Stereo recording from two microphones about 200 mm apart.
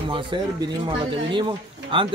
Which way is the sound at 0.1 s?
25° right (ahead or behind).